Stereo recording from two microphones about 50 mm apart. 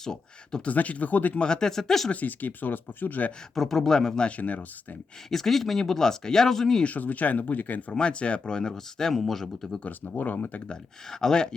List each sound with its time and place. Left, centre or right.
0.0 s speech: centre
0.6 s speech: left
1.4 s speech: centre
2.0 s speech: left
3.5 s speech: centre
4.3 s speech: left
5.3 s speech: centre
6.8 s speech: left
7.9 s speech: left
9.8 s speech: left
10.7 s speech: centre